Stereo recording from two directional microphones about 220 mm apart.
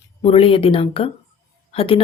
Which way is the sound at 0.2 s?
25° left (ahead or behind).